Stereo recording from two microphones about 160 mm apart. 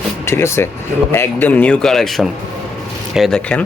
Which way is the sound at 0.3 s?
15° left (ahead or behind).